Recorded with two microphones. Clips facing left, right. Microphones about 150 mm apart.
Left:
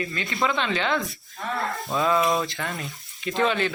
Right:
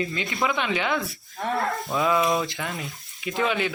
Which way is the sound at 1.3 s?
25° right (ahead or behind).